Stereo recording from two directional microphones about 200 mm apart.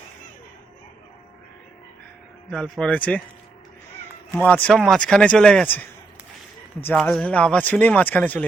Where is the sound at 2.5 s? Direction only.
5° left (ahead or behind).